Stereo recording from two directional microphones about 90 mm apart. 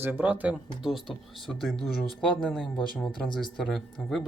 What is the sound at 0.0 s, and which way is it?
Speech, 20° right (ahead or behind).